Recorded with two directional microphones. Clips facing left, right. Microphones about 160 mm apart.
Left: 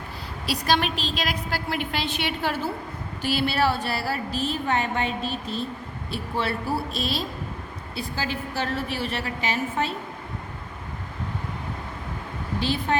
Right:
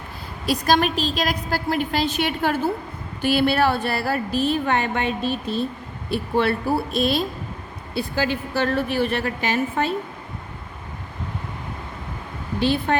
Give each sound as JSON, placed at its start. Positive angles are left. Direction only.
{"t": 0.4, "sound": "a woman's voice", "side_deg": -45}
{"t": 12.5, "sound": "a woman's voice", "side_deg": -60}